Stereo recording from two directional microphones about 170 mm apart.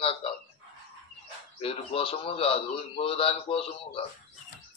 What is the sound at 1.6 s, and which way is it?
Speech, 35° left (ahead or behind).